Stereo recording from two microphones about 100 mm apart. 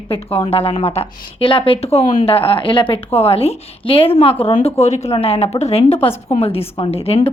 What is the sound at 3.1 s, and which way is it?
A woman's voice, 80° left.